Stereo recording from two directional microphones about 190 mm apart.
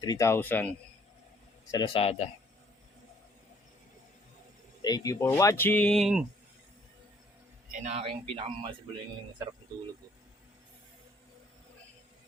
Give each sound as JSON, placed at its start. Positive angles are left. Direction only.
{"t": 0.0, "sound": "speech", "side_deg": 20}
{"t": 1.7, "sound": "a man's voice", "side_deg": 25}
{"t": 4.8, "sound": "speech", "side_deg": 20}
{"t": 7.7, "sound": "speech", "side_deg": -40}